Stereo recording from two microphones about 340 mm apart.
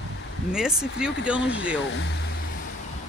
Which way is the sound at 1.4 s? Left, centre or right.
Left.